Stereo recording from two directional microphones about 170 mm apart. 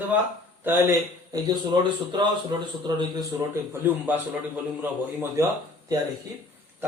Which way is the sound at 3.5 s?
10° right (ahead or behind).